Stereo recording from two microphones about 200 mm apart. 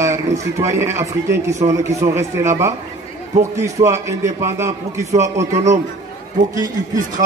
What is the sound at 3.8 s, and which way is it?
A man's voice, 15° right (ahead or behind).